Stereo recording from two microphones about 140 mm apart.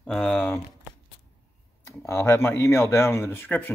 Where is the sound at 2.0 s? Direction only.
15° left (ahead or behind).